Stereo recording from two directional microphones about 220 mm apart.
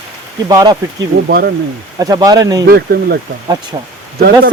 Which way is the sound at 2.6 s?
45° right (ahead or behind).